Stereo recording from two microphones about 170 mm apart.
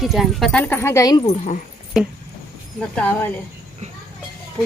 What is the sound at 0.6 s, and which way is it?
Speech, 15° left (ahead or behind).